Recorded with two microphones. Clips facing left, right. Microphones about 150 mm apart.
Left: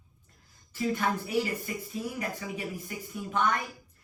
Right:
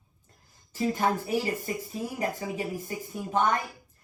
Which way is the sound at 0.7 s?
40° right (ahead or behind).